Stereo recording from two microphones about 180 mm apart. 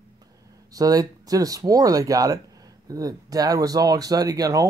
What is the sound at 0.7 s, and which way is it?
Speech, 20° right (ahead or behind).